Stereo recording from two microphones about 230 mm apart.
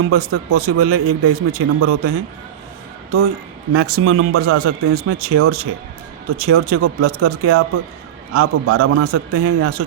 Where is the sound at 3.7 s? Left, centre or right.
Right.